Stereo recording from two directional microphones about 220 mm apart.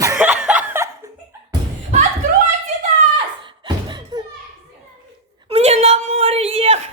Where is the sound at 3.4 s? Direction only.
20° right (ahead or behind).